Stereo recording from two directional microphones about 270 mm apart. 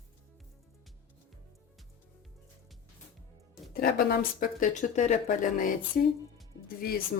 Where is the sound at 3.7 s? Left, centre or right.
Left.